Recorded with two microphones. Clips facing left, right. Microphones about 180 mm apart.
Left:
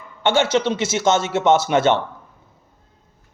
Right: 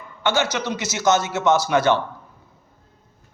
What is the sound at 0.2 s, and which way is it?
A man's voice, 25° left (ahead or behind).